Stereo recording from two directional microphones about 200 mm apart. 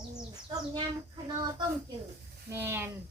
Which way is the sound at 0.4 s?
25° right (ahead or behind).